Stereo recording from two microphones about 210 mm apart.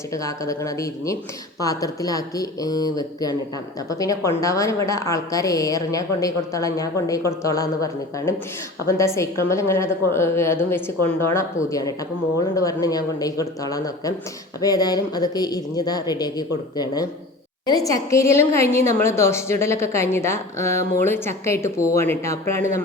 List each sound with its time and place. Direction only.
0.1 s a woman's voice: 15° left (ahead or behind)